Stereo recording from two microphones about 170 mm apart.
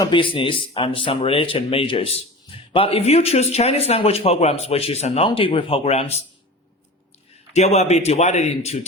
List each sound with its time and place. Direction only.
0.0 s speech: 30° left (ahead or behind)
7.5 s speech: 40° left (ahead or behind)